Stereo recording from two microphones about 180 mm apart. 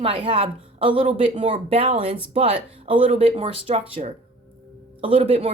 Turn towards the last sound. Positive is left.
turn(degrees=-35)  # may be behind; listen again after turning